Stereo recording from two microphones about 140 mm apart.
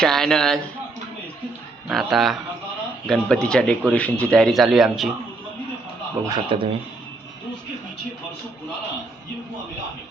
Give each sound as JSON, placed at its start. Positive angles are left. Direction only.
{"t": 0.0, "sound": "speech", "side_deg": 5}
{"t": 1.9, "sound": "speech", "side_deg": 0}
{"t": 6.2, "sound": "speech", "side_deg": -35}